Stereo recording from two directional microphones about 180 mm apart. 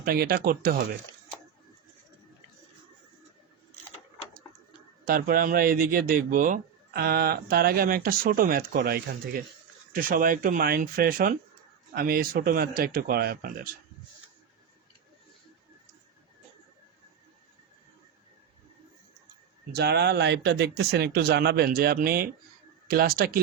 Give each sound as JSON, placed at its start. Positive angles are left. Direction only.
{"t": 0.0, "sound": "a man's voice", "side_deg": -60}
{"t": 5.0, "sound": "a man's voice", "side_deg": -55}
{"t": 19.7, "sound": "a man's voice", "side_deg": -65}